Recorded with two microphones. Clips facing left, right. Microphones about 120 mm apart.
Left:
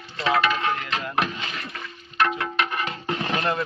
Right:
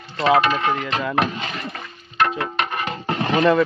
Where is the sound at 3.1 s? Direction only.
45° right (ahead or behind).